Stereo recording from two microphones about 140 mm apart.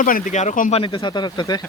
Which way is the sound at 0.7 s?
35° left (ahead or behind).